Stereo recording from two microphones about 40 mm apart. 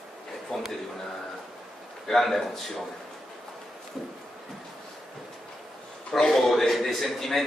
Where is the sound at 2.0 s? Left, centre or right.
Centre.